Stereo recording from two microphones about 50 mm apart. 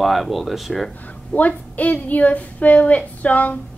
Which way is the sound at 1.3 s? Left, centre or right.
Left.